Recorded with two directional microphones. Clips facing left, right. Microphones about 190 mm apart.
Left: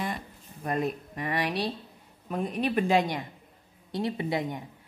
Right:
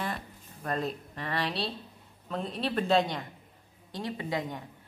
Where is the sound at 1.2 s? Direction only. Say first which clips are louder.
Left 3 dB; 15° left (ahead or behind).